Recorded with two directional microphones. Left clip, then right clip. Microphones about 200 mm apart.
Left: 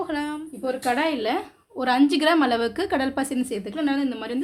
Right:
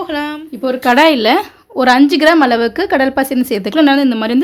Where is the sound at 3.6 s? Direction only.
50° right (ahead or behind).